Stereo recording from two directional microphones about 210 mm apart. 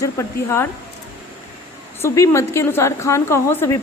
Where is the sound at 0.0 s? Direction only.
15° left (ahead or behind).